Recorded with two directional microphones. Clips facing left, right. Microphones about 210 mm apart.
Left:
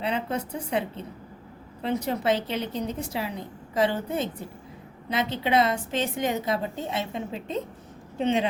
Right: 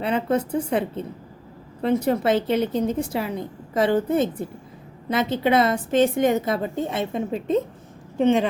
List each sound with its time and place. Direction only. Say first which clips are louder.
0.0 s a woman's voice: right 6 dB; 50° right (ahead or behind)